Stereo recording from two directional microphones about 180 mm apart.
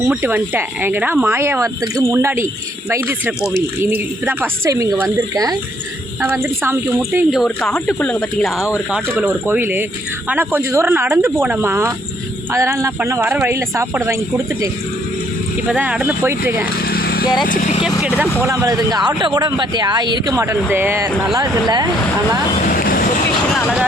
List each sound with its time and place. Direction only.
0.1 s speech: 10° right (ahead or behind)
7.3 s speech: centre (ahead or behind)
16.8 s vehicle: 60° left (ahead or behind)
17.4 s speech: 45° left (ahead or behind)
18.4 s speech: 15° right (ahead or behind)
22.6 s vehicle: 50° left (ahead or behind)